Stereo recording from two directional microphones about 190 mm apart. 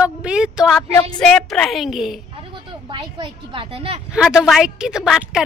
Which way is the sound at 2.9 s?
25° right (ahead or behind).